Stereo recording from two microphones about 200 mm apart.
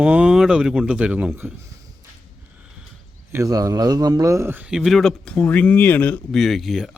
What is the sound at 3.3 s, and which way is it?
A man's voice, 15° right (ahead or behind).